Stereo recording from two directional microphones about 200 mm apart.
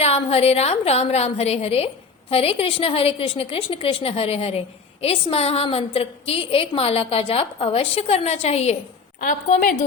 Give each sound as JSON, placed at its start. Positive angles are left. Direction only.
{"t": 0.0, "sound": "a woman's voice", "side_deg": 30}